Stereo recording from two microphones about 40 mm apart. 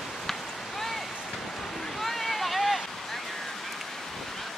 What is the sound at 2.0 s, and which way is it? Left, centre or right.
Boat, centre.